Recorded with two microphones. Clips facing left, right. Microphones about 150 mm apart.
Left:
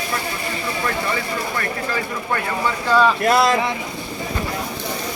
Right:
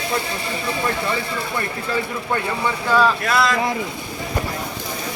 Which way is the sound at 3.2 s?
30° left (ahead or behind).